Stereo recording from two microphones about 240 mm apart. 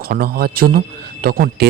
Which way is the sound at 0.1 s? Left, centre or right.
Right.